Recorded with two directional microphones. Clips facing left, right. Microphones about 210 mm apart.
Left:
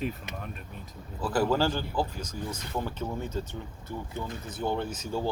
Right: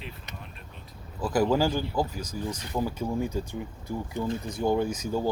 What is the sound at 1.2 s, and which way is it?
Speech, 10° right (ahead or behind).